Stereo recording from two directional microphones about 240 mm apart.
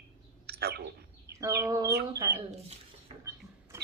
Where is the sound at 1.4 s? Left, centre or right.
Centre.